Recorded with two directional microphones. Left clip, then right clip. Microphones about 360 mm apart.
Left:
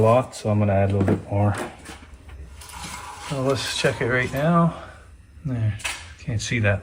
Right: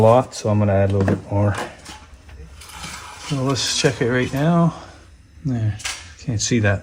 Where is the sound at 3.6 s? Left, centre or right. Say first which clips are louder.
Right 4 dB; centre.